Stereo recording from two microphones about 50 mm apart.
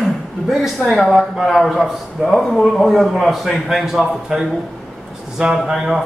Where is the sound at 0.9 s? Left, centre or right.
Centre.